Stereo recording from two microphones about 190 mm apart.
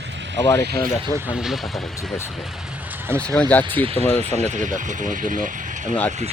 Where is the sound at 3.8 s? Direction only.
30° right (ahead or behind).